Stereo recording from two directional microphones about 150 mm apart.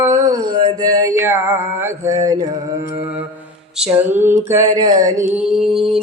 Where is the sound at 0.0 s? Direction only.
20° right (ahead or behind).